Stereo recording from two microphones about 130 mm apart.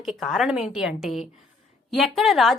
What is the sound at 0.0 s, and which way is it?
A woman's voice, centre (ahead or behind).